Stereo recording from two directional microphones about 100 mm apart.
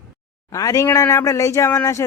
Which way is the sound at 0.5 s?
35° left (ahead or behind).